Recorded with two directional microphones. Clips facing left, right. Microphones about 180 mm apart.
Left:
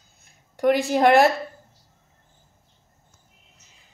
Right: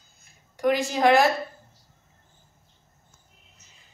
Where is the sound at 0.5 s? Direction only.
60° left (ahead or behind).